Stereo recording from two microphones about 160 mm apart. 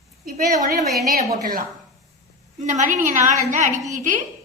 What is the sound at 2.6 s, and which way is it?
A woman's voice, 50° right (ahead or behind).